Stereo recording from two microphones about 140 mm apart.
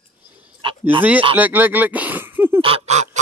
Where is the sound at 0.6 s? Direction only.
35° right (ahead or behind).